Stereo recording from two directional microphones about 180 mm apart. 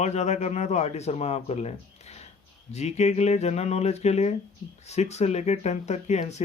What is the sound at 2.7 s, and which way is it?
Speech, 40° left (ahead or behind).